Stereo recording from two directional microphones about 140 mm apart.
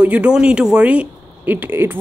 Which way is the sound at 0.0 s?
10° right (ahead or behind).